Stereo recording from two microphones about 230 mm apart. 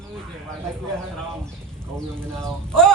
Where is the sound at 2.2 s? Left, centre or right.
Centre.